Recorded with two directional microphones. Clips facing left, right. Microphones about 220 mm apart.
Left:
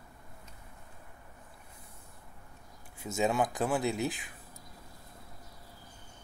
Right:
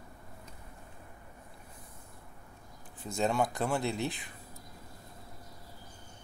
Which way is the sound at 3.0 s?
5° left (ahead or behind).